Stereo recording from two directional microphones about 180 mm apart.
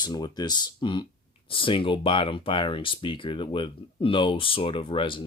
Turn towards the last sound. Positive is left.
turn(degrees=30)  # may be behind; listen again after turning